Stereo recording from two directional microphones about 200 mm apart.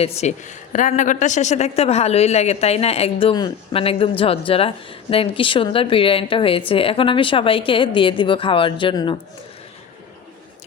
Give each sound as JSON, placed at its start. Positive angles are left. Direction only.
{"t": 0.0, "sound": "a woman's voice", "side_deg": 35}